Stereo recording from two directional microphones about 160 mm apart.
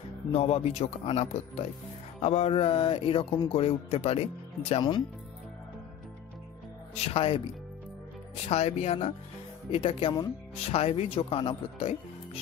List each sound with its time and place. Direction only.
0.3 s a man's voice: 40° left (ahead or behind)
7.2 s a man's voice: 35° left (ahead or behind)
8.5 s a man's voice: 40° left (ahead or behind)
10.5 s a man's voice: 40° left (ahead or behind)